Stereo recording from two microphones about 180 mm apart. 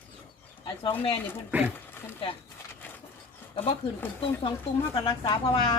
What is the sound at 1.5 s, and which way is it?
Speech, 10° right (ahead or behind).